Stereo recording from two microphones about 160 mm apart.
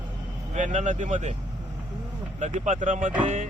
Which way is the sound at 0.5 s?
50° right (ahead or behind).